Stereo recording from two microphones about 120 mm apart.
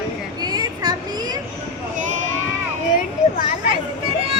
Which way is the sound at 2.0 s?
90° right.